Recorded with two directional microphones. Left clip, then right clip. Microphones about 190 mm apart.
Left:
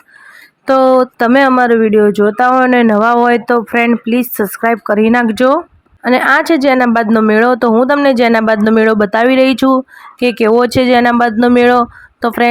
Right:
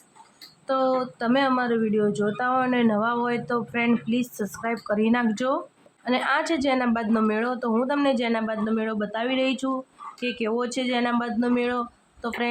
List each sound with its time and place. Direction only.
0.6 s speech: 40° left (ahead or behind)